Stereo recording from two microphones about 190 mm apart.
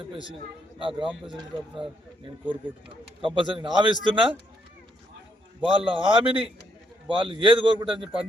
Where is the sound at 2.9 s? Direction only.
25° right (ahead or behind).